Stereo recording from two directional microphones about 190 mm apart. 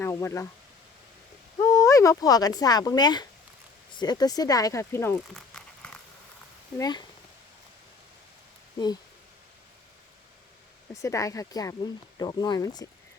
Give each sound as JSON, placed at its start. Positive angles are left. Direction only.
{"t": 0.0, "sound": "speech", "side_deg": 15}
{"t": 1.6, "sound": "speech", "side_deg": 15}
{"t": 5.3, "sound": "a sound", "side_deg": 5}
{"t": 6.7, "sound": "speech", "side_deg": 20}
{"t": 10.9, "sound": "speech", "side_deg": 15}